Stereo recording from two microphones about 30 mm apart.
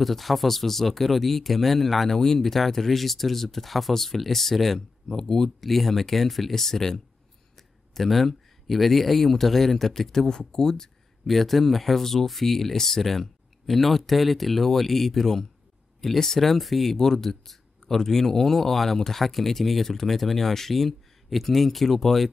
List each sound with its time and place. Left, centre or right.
0.0 s speech: centre
2.0 s speech: centre
4.7 s speech: centre
5.6 s speech: centre; by 10.9 s left
11.2 s speech: centre